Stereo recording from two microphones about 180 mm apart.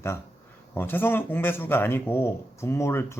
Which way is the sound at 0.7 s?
10° left (ahead or behind).